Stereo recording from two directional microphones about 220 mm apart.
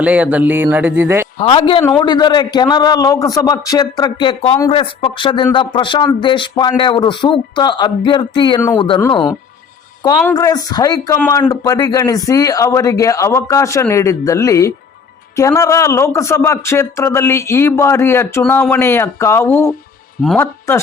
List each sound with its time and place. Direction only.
0.0 s speech: 5° right (ahead or behind)
1.4 s a man's voice: 25° left (ahead or behind); by 20.8 s 10° left (ahead or behind)